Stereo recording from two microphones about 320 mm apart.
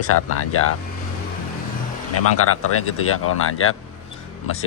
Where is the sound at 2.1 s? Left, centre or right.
Left.